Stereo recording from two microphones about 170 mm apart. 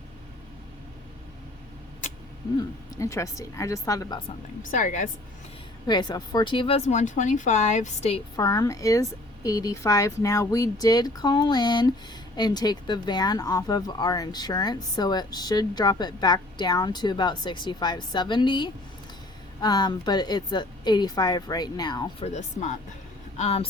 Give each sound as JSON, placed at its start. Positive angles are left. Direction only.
{"t": 2.6, "sound": "speech", "side_deg": 20}
{"t": 4.7, "sound": "speech", "side_deg": 50}
{"t": 5.9, "sound": "speech", "side_deg": 25}
{"t": 8.4, "sound": "speech", "side_deg": 20}
{"t": 22.2, "sound": "speech", "side_deg": 40}